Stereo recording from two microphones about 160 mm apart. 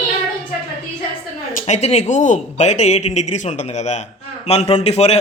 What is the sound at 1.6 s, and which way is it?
A man's voice, 40° left (ahead or behind).